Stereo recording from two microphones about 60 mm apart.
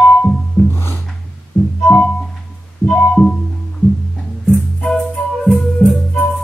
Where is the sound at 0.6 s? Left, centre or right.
Left.